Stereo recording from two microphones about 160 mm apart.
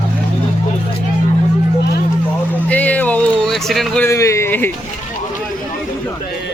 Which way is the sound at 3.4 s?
Centre (ahead or behind).